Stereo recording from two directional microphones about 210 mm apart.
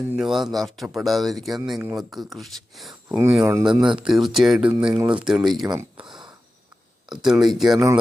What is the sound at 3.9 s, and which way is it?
Speech, centre (ahead or behind).